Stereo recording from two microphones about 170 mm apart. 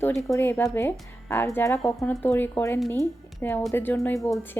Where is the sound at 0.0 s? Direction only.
15° left (ahead or behind).